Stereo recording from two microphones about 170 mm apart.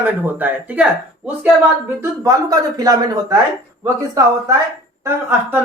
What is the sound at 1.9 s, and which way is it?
Speech, 20° right (ahead or behind).